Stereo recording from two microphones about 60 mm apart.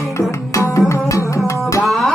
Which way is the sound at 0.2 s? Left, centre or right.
Left.